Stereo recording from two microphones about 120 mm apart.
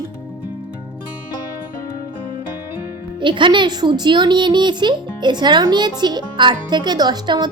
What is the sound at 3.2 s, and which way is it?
Speech, 40° right (ahead or behind).